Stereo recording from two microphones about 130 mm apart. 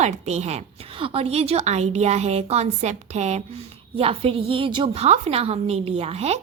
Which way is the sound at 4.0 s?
45° right (ahead or behind).